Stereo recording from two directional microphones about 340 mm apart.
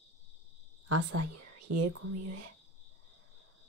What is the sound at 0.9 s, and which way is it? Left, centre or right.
Speech, right.